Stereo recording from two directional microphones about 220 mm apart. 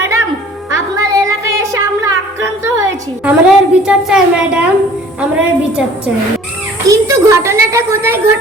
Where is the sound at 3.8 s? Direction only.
5° right (ahead or behind).